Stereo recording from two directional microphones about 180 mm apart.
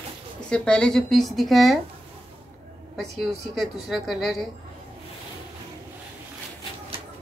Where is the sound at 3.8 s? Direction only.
Centre (ahead or behind).